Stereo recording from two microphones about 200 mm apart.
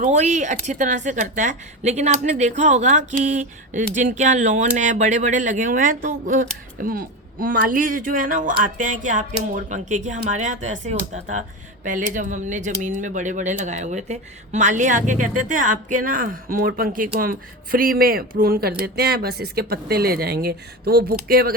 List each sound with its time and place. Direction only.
0.0 s speech: 35° right (ahead or behind)